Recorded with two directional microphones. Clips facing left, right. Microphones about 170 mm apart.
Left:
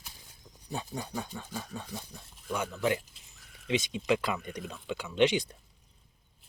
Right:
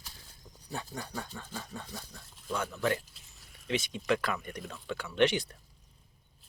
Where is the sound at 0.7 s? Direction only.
15° left (ahead or behind).